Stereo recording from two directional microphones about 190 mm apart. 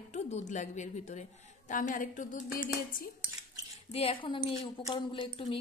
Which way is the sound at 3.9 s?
30° left (ahead or behind).